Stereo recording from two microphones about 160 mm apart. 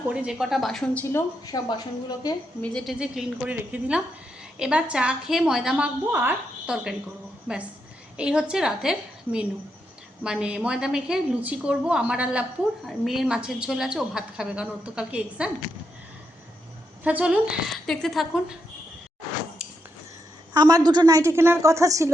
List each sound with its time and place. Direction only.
0.1 s a woman's voice: 5° right (ahead or behind)
1.0 s a woman's voice: 20° left (ahead or behind)
2.6 s a woman's voice: 5° left (ahead or behind)
3.0 s a woman's voice: 5° right (ahead or behind)
17.0 s a woman's voice: 10° right (ahead or behind)
20.5 s a woman's voice: 25° right (ahead or behind)